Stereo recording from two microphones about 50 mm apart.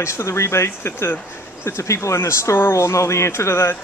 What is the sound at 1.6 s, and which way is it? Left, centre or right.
Speech, left.